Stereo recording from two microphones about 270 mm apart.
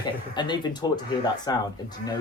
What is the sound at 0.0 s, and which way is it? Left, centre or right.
Speech, centre.